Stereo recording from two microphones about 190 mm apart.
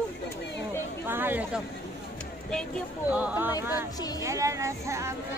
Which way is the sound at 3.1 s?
10° right (ahead or behind).